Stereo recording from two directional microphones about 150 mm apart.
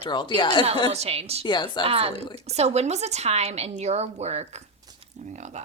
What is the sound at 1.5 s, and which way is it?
Speech, 30° left (ahead or behind).